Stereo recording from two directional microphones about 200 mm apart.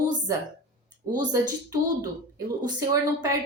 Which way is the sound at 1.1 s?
20° right (ahead or behind).